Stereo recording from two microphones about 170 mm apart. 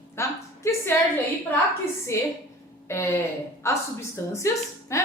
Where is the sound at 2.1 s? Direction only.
15° left (ahead or behind).